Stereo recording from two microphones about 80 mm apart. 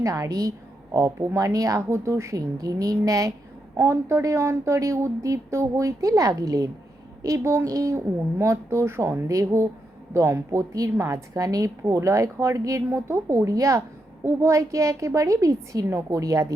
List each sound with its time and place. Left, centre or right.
0.0 s a woman's voice: right
0.9 s a woman's voice: right
3.8 s a woman's voice: right